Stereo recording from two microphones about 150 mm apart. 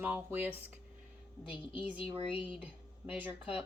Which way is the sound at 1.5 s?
35° left (ahead or behind).